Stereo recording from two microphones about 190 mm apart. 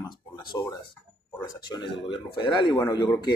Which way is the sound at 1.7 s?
25° left (ahead or behind).